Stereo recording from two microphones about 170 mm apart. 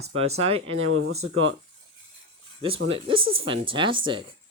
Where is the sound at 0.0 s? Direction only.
40° right (ahead or behind).